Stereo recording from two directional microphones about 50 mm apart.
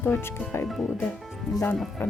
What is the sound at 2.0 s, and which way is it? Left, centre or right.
Speech, left.